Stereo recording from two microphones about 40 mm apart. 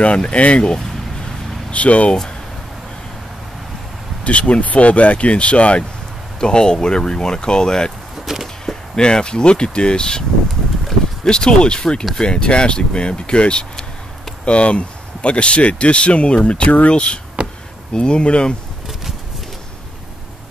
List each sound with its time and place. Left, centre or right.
0.0 s speech: left
1.7 s speech: left
4.2 s speech: left
6.4 s speech: centre
8.3 s a sound: centre
8.9 s speech: left
11.2 s speech: left
17.9 s speech: left